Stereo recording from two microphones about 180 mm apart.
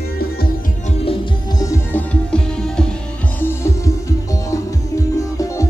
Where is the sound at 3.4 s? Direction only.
15° left (ahead or behind).